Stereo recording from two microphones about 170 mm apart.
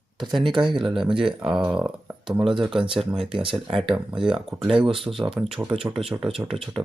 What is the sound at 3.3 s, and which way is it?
Speech, 30° right (ahead or behind).